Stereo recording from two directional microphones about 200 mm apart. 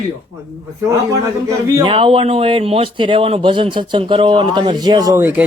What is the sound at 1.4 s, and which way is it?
Speech, 15° right (ahead or behind).